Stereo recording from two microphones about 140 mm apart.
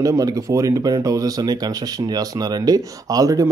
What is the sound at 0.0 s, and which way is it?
Speech, 25° right (ahead or behind).